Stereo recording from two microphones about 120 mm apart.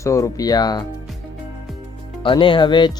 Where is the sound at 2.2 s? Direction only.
45° left (ahead or behind).